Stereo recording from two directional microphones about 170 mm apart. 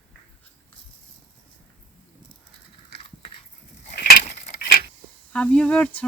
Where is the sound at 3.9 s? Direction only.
65° left (ahead or behind).